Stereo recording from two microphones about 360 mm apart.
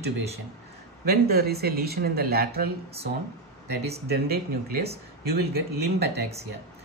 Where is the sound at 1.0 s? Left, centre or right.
Right.